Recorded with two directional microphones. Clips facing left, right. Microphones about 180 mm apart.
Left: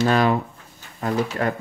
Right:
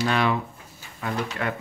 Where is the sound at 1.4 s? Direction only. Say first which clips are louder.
Left 4 dB; 40° left (ahead or behind).